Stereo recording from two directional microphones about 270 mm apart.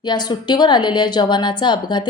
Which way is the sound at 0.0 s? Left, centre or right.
Centre.